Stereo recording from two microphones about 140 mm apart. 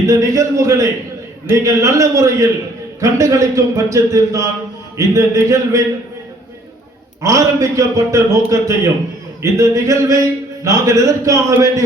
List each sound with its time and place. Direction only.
0.1 s speech: 20° right (ahead or behind)
7.2 s speech: 20° right (ahead or behind)